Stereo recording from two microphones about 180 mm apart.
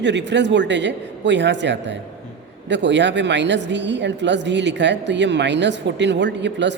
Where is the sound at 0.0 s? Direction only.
80° right.